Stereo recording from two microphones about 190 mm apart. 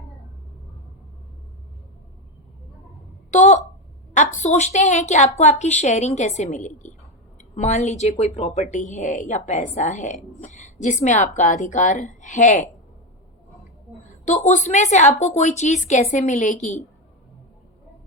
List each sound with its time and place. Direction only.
3.3 s a sound: 35° left (ahead or behind)
4.1 s a woman's voice: 40° left (ahead or behind)
14.0 s a woman's voice: 40° left (ahead or behind)